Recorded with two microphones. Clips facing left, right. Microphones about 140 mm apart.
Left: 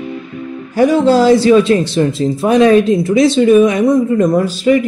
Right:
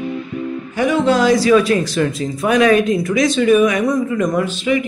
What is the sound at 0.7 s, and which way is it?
Speech, 35° left (ahead or behind).